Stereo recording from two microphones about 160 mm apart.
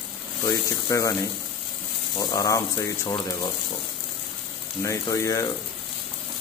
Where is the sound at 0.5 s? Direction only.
20° left (ahead or behind).